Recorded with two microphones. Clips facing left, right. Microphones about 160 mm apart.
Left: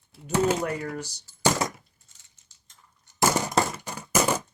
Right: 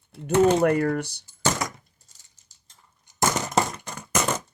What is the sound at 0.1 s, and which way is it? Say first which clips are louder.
Speech: right 5 dB; 10° left (ahead or behind).